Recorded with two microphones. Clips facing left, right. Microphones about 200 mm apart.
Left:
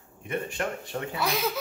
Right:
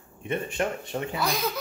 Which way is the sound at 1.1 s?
5° left (ahead or behind).